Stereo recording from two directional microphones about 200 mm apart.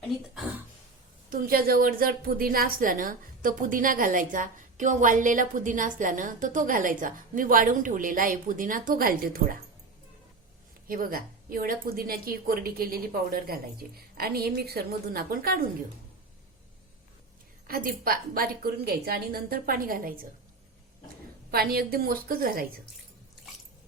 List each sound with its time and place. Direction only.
1.3 s a woman's voice: 45° right (ahead or behind)
10.8 s a woman's voice: 45° right (ahead or behind)
17.7 s a woman's voice: 45° right (ahead or behind)
21.5 s a woman's voice: 50° right (ahead or behind)